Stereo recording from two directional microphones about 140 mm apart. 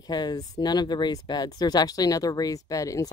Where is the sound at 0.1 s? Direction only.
30° left (ahead or behind).